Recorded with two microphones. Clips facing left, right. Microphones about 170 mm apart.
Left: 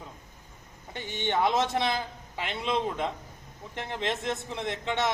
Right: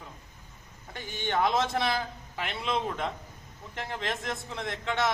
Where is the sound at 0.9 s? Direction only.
25° left (ahead or behind).